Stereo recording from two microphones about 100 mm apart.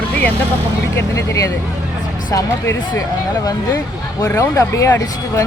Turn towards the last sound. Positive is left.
turn(degrees=30)  # may be behind; listen again after turning